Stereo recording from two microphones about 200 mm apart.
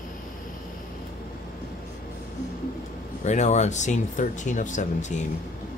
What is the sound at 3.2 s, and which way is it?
Speech, 35° left (ahead or behind).